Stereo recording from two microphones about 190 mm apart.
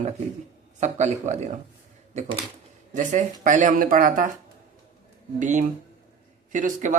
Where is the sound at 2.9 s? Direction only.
40° right (ahead or behind).